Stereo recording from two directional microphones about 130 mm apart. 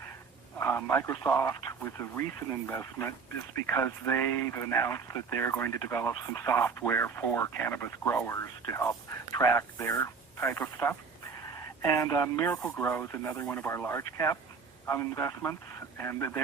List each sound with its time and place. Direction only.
0.6 s a man's voice: 20° left (ahead or behind)
11.9 s speech: 25° left (ahead or behind)